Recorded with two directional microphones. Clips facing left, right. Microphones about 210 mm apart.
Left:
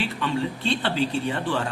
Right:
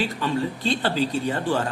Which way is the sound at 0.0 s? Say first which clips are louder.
Right 1 dB; 40° right (ahead or behind).